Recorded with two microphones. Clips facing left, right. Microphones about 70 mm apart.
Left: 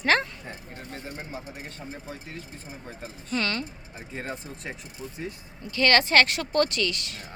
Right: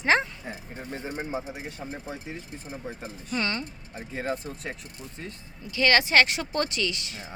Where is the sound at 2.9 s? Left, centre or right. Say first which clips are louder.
Left 1 dB; centre.